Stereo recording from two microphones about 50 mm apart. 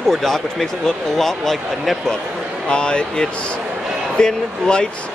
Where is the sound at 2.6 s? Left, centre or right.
Centre.